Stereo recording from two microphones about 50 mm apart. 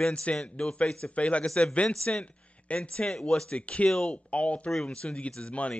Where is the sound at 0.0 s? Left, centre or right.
Left.